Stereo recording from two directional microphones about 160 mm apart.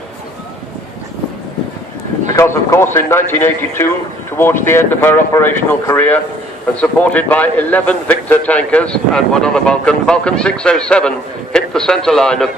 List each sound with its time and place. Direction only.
2.3 s a man's voice: 15° left (ahead or behind)